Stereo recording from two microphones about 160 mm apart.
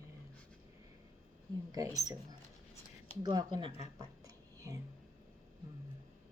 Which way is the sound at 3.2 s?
25° right (ahead or behind).